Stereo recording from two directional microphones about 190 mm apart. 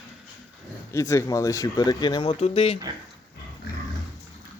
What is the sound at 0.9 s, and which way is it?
Speech, 15° left (ahead or behind).